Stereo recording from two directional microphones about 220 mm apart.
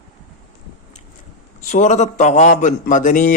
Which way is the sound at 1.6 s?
35° left (ahead or behind).